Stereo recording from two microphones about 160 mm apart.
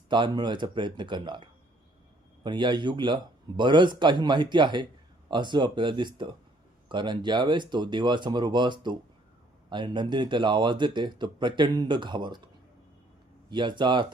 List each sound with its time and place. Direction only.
0.1 s speech: 30° right (ahead or behind)
13.5 s speech: 30° right (ahead or behind)